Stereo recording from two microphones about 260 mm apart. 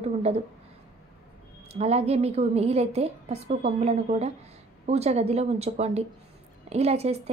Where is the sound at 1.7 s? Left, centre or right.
Right.